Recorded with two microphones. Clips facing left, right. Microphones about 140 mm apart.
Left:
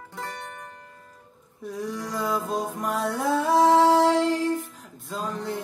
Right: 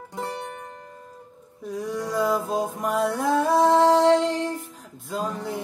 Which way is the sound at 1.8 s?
Centre (ahead or behind).